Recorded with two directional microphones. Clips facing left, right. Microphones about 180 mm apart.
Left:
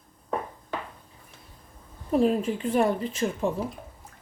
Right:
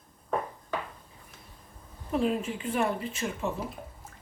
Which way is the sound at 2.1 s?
40° left (ahead or behind).